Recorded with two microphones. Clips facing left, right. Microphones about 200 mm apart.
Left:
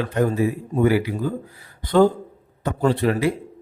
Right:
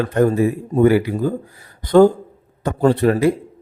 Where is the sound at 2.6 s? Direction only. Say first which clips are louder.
Right 5 dB; 45° right (ahead or behind).